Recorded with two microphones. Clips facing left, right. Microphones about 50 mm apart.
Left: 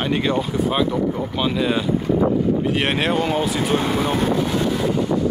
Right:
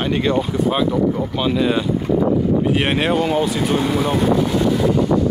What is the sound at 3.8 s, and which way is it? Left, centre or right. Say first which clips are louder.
Speech: right 2 dB; left.